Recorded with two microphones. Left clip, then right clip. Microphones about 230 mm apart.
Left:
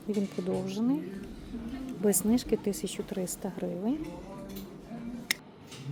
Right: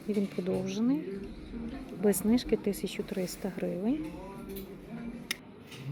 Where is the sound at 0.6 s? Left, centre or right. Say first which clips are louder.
Even; centre.